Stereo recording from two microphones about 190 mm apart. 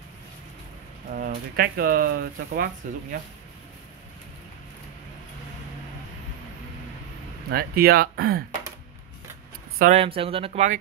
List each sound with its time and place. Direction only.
1.1 s speech: 50° right (ahead or behind)
7.5 s speech: 55° right (ahead or behind)
9.8 s speech: 40° right (ahead or behind)
10.0 s speech: 30° right (ahead or behind)